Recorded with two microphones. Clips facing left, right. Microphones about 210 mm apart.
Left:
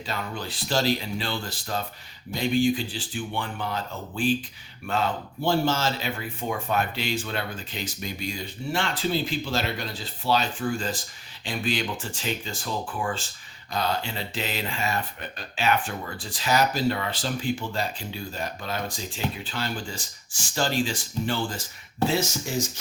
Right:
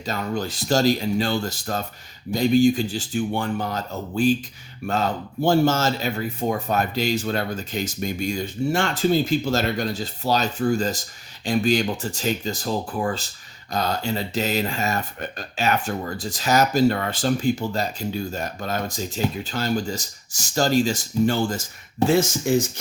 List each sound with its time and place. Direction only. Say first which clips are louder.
0.0 s speech: right 6 dB; 45° right (ahead or behind)